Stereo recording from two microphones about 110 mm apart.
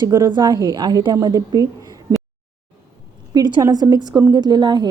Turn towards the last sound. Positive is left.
turn(degrees=-40)  # may be behind; listen again after turning